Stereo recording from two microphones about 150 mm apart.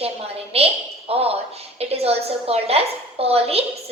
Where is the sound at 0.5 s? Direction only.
40° right (ahead or behind).